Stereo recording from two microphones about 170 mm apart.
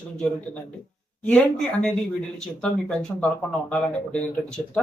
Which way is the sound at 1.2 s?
5° left (ahead or behind).